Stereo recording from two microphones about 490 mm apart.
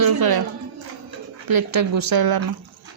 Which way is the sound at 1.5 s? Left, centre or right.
Right.